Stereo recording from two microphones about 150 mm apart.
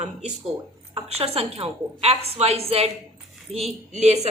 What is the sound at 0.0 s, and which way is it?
A woman's voice, 45° right (ahead or behind).